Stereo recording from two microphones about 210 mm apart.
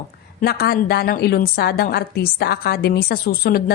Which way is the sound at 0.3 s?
50° left (ahead or behind).